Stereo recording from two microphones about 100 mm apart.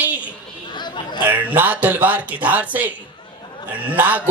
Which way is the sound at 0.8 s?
45° left (ahead or behind).